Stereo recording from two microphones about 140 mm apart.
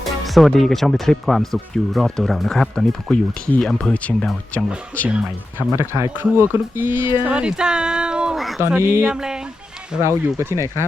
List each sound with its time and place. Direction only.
0.0 s speech: centre (ahead or behind)
5.0 s speech: 10° right (ahead or behind)
10.3 s speech: 20° right (ahead or behind)